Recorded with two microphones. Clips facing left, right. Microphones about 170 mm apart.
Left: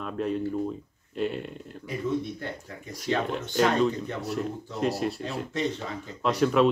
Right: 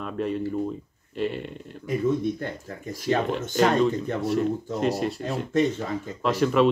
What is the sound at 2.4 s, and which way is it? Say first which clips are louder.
Speech: right 4 dB; 50° right (ahead or behind).